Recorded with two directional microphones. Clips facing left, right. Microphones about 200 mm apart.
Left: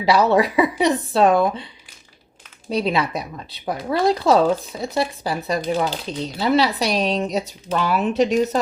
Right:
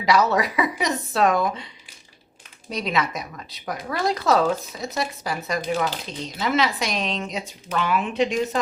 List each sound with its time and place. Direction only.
0.0 s speech: 30° left (ahead or behind)
2.6 s speech: 30° left (ahead or behind)